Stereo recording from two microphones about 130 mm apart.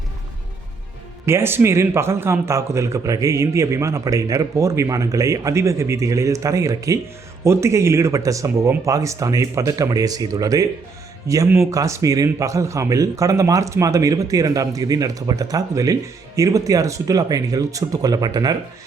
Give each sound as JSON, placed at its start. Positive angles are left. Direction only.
{"t": 1.2, "sound": "a man's voice", "side_deg": -20}